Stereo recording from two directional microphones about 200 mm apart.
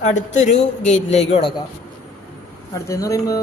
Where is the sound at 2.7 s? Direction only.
15° left (ahead or behind).